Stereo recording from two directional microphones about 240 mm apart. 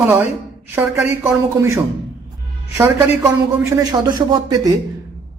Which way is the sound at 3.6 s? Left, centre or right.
Centre.